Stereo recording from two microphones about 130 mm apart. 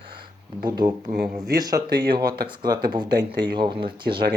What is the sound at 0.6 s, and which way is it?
Speech, 35° right (ahead or behind).